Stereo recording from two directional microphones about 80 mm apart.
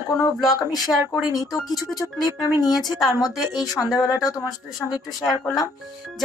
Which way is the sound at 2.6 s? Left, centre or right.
Left.